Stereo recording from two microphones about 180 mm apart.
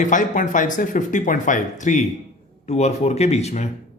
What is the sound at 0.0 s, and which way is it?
Speech, 45° left (ahead or behind).